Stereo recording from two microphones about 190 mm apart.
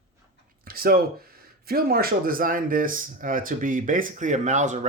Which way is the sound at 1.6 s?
50° right (ahead or behind).